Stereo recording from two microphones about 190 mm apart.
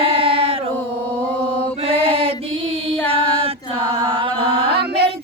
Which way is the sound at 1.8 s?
30° right (ahead or behind).